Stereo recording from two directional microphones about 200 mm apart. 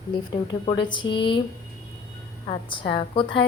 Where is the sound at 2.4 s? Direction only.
25° left (ahead or behind).